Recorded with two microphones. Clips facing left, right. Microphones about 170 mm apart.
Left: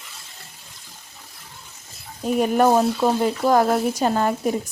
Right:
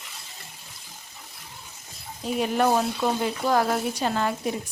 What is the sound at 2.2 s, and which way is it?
Speech, 45° left (ahead or behind).